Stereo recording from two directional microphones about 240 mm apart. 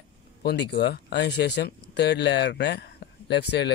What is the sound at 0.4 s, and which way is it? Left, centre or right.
Speech, left.